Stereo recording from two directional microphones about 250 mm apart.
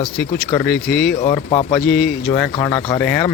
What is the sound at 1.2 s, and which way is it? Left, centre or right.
Speech, left.